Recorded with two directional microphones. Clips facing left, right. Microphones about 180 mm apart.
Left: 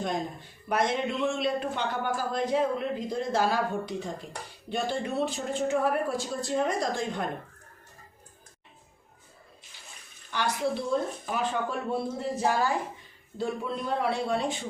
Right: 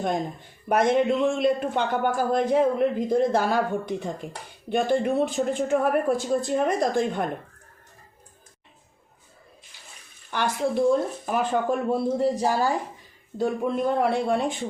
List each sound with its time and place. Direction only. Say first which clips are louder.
0.7 s speech: right 7 dB; 50° right (ahead or behind)
10.3 s speech: right 4 dB; 50° right (ahead or behind); by 12.7 s 35° right (ahead or behind)
13.4 s speech: right 7 dB; 50° right (ahead or behind)